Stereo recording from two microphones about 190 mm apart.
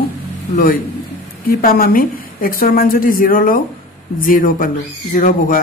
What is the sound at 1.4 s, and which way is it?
Speech, 50° left (ahead or behind).